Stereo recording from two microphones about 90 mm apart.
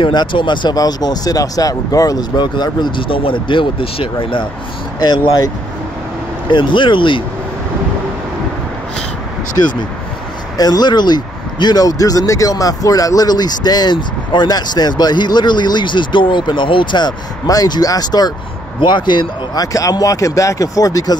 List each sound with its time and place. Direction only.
0.0 s speech: 60° left (ahead or behind)
0.7 s speech: 50° left (ahead or behind)
2.3 s speech: 55° left (ahead or behind); by 4.5 s 75° left (ahead or behind)
5.0 s speech: 50° left (ahead or behind)
6.5 s speech: 65° left (ahead or behind)
10.6 s speech: 50° left (ahead or behind)
18.8 s speech: 60° left (ahead or behind); by 21.2 s 40° left (ahead or behind)